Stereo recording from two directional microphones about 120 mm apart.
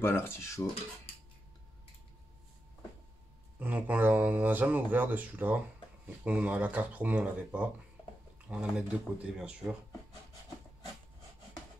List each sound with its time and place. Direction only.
0.0 s cutlery: 20° left (ahead or behind)
3.5 s speech: 15° right (ahead or behind)